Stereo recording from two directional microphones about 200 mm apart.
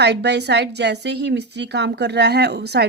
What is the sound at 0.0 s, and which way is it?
A woman's voice, 60° right (ahead or behind).